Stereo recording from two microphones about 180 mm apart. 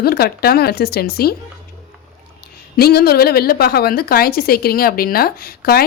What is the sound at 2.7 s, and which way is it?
A woman's voice, 60° left (ahead or behind).